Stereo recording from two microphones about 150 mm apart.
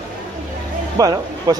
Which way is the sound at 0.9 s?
25° right (ahead or behind).